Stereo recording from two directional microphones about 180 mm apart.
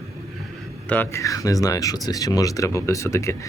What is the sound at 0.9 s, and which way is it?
Speech, 15° left (ahead or behind).